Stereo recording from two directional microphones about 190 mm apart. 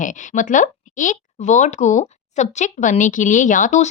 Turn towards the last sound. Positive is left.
turn(degrees=40)  # may be behind; listen again after turning